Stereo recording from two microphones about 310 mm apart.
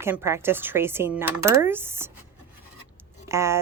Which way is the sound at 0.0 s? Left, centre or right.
Centre.